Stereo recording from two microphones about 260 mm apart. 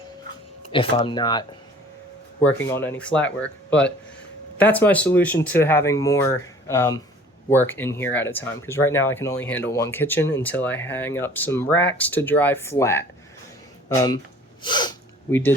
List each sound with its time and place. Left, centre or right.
0.7 s speech: centre
14.6 s snort: centre